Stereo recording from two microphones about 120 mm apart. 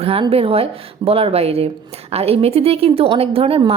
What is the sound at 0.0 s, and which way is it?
A woman's voice, 55° right (ahead or behind).